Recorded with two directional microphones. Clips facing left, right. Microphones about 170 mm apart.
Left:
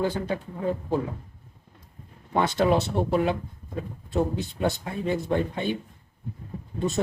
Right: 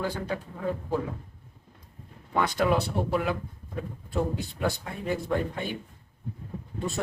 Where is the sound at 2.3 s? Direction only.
25° left (ahead or behind).